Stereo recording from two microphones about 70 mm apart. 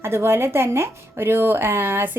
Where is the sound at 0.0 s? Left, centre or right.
Right.